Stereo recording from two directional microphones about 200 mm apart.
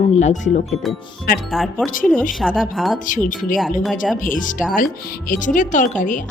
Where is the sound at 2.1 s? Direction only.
40° left (ahead or behind).